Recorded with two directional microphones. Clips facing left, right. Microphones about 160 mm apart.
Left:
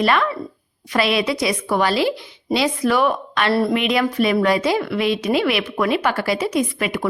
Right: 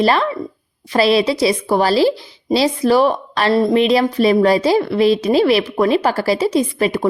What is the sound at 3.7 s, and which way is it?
A woman's voice, 30° right (ahead or behind).